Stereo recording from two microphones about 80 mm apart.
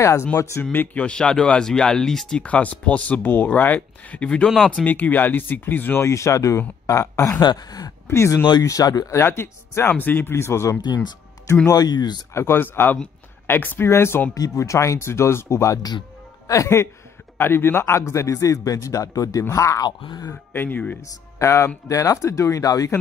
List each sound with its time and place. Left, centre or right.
0.0 s a man's voice: left
0.7 s speech: centre
6.0 s a man's voice: left
7.4 s speech: left
8.1 s a man's voice: left
8.6 s speech: left
9.1 s a man's voice: left
11.7 s speech: left
12.4 s a man's voice: left
14.3 s a man's voice: left
19.8 s speech: left
20.5 s speech: left
21.0 s a man's voice: left